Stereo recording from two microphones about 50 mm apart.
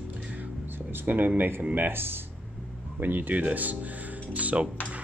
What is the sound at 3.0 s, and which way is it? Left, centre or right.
Speech, right.